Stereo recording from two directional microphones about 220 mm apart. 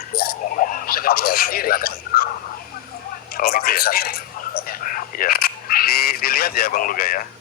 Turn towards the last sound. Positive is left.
turn(degrees=40)  # may be behind; listen again after turning